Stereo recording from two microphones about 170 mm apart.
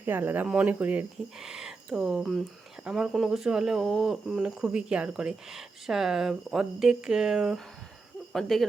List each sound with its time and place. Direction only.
0.0 s speech: 10° right (ahead or behind)
8.3 s hoot: centre (ahead or behind)